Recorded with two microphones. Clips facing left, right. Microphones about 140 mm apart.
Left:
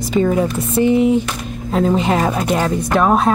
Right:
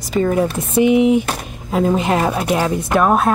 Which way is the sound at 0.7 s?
15° right (ahead or behind).